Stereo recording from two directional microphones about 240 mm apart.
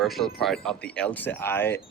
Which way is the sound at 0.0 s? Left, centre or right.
Centre.